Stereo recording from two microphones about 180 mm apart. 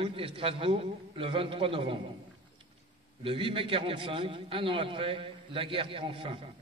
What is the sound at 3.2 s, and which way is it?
A man's voice, 30° right (ahead or behind).